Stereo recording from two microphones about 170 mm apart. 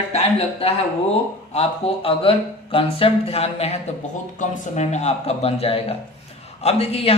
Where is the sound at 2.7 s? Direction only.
35° left (ahead or behind).